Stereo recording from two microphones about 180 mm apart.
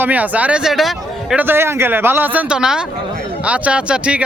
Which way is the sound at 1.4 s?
10° right (ahead or behind).